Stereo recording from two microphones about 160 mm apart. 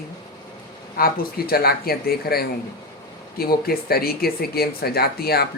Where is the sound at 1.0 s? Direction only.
70° left (ahead or behind).